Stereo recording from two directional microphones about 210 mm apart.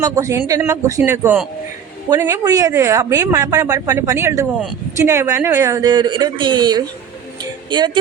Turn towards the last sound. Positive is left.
turn(degrees=-20)  # may be behind; listen again after turning